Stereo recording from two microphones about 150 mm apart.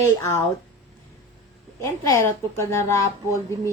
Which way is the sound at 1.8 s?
20° left (ahead or behind).